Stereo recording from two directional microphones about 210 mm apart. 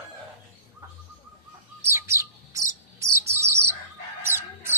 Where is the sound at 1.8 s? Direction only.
10° right (ahead or behind).